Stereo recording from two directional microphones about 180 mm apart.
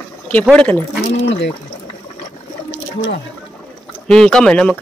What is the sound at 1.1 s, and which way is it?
Speech, 80° left.